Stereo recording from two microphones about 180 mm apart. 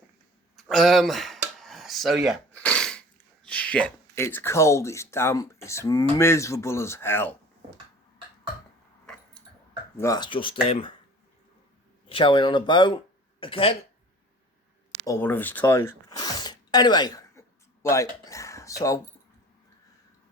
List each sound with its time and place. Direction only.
0.5 s a sound: centre (ahead or behind)
2.6 s sneeze: 5° left (ahead or behind)
3.4 s speech: 5° left (ahead or behind)
9.1 s keys jangling: 5° left (ahead or behind)
10.0 s speech: 20° left (ahead or behind)
12.0 s speech: 30° left (ahead or behind)
15.0 s speech: 15° left (ahead or behind)
17.8 s a sound: 15° left (ahead or behind)